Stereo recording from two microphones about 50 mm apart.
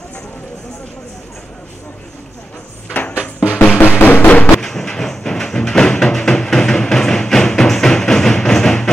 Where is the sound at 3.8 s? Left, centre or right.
Left.